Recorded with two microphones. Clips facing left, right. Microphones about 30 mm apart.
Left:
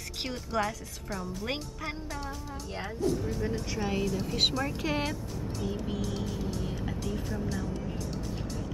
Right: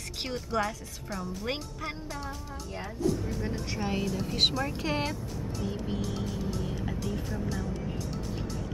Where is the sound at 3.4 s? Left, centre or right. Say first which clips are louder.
Left 1 dB; centre.